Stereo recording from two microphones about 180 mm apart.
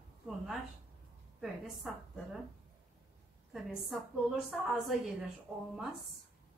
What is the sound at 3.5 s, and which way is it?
Speech, centre (ahead or behind).